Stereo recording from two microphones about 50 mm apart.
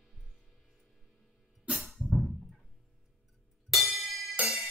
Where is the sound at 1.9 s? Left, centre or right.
Centre.